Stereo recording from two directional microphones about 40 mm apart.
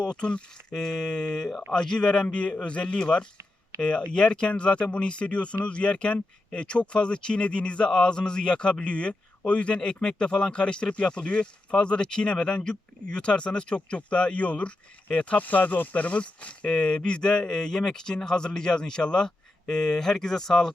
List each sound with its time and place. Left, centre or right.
0.0 s speech: left
0.7 s speech: centre; by 16.6 s left
16.6 s speech: left